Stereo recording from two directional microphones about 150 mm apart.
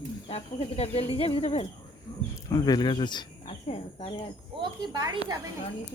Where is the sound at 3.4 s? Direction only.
45° left (ahead or behind).